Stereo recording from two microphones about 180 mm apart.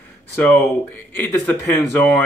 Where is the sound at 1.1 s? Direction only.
10° left (ahead or behind).